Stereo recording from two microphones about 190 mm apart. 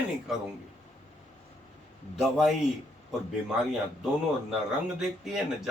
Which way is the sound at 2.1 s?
5° right (ahead or behind).